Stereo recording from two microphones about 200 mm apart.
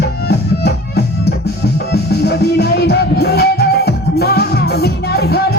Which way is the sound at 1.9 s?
55° left (ahead or behind).